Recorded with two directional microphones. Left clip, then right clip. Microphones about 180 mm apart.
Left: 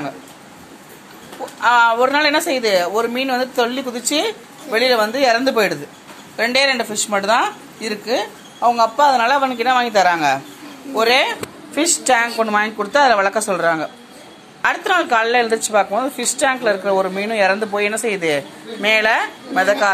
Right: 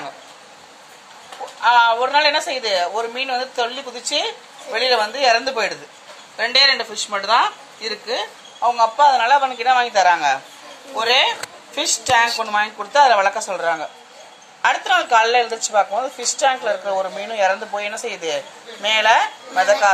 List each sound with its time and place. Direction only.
1.6 s a woman's voice: 25° left (ahead or behind)